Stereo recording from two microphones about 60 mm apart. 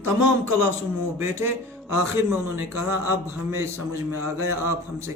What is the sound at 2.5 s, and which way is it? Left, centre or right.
A man's voice, right.